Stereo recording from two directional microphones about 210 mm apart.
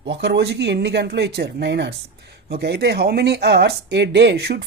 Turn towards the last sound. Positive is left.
turn(degrees=-55)  # may be behind; listen again after turning